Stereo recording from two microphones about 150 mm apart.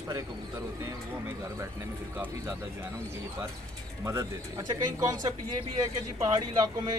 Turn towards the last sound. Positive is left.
turn(degrees=-25)  # may be behind; listen again after turning